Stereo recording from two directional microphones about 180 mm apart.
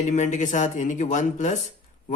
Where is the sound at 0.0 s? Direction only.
40° left (ahead or behind).